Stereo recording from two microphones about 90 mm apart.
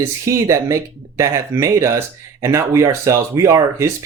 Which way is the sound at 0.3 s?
35° right (ahead or behind).